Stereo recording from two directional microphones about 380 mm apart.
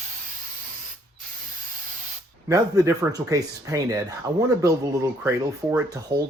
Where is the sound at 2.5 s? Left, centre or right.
Centre.